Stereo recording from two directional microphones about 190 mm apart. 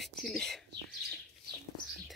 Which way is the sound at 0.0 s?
Centre (ahead or behind).